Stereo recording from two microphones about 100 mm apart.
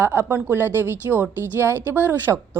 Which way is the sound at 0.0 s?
20° right (ahead or behind).